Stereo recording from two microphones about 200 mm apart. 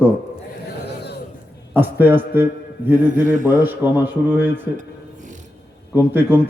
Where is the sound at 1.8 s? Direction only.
10° right (ahead or behind).